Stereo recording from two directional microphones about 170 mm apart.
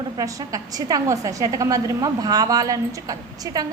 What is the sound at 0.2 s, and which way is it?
A woman's voice, 20° right (ahead or behind).